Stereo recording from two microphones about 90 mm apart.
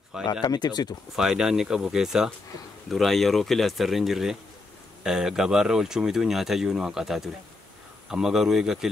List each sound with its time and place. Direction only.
0.2 s speech: 55° left (ahead or behind)
1.1 s speech: 5° right (ahead or behind)